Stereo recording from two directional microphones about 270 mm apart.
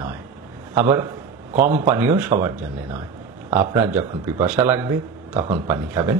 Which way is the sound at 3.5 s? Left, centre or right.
Centre.